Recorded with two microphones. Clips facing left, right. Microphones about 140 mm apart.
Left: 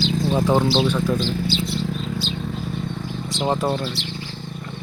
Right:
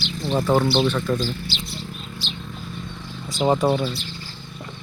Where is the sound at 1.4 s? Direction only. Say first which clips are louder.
Left 9 dB; 90° left; by 2.7 s 70° left (ahead or behind).